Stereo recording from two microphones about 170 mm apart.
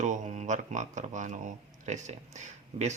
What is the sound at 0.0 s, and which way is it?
Speech, 45° right (ahead or behind).